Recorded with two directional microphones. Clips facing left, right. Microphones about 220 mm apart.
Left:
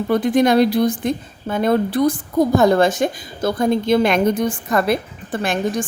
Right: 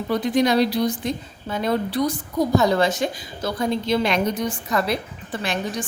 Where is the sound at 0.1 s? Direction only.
50° left (ahead or behind).